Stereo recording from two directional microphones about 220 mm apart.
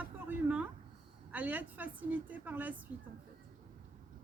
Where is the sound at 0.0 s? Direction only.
5° right (ahead or behind).